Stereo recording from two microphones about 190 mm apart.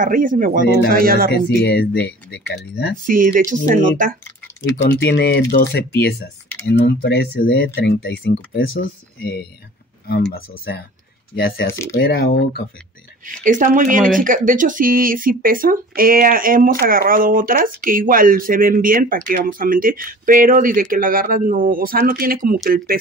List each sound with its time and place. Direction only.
0.0 s speech: 45° right (ahead or behind)
1.3 s speech: 60° left (ahead or behind)
3.1 s speech: 45° right (ahead or behind)
4.8 s speech: 65° left (ahead or behind)
10.3 s speech: 55° left (ahead or behind)
11.3 s speech: 75° left (ahead or behind)
11.7 s speech: 15° left (ahead or behind)
12.0 s speech: 55° left (ahead or behind)
13.4 s speech: 40° right (ahead or behind)